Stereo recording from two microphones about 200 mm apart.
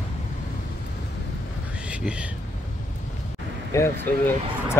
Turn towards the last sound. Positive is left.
turn(degrees=10)  # may be behind; listen again after turning